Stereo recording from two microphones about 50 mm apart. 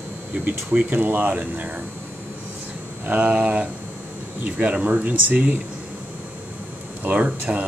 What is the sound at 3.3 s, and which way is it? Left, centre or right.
Speech, right.